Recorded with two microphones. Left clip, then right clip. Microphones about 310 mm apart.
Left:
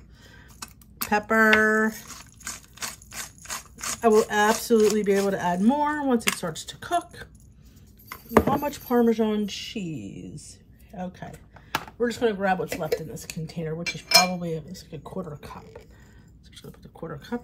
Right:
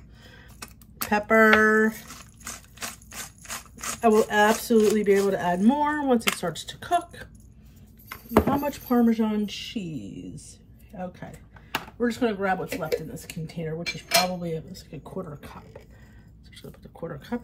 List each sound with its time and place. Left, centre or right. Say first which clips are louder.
0.6 s a sound: even; centre
4.3 s speech: even; centre
8.3 s speech: left 1 dB; centre
9.5 s speech: left 1 dB; centre
9.8 s music: left 1 dB; left
11.0 s speech: even; centre